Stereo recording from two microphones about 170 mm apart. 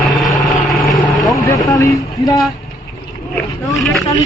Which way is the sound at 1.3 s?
20° left (ahead or behind).